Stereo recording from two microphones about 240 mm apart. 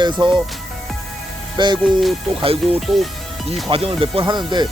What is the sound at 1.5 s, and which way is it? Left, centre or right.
Speech, centre.